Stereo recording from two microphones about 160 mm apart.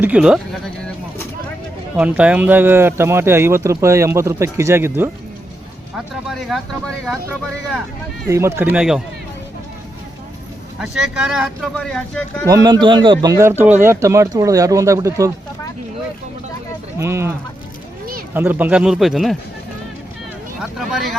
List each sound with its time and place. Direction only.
0.0 s speech: 5° right (ahead or behind)
2.0 s speech: 10° right (ahead or behind)
6.2 s speech: centre (ahead or behind)
8.3 s speech: 15° right (ahead or behind)
10.8 s speech: 5° right (ahead or behind)
12.5 s a man's voice: 25° right (ahead or behind)
17.0 s speech: 15° right (ahead or behind)
18.3 s speech: 10° right (ahead or behind)
20.6 s speech: centre (ahead or behind)